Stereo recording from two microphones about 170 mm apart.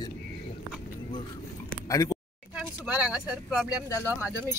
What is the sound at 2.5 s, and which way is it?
Speech, 5° right (ahead or behind).